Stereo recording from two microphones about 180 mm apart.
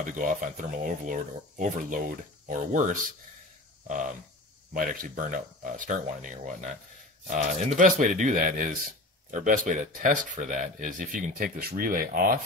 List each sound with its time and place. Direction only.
0.0 s speech: 45° right (ahead or behind)